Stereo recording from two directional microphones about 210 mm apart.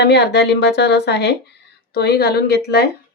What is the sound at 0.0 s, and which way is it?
Speech, 55° left (ahead or behind).